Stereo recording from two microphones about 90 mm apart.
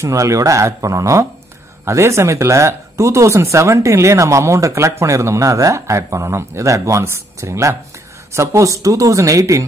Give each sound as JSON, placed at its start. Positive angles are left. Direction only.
{"t": 0.0, "sound": "speech", "side_deg": -35}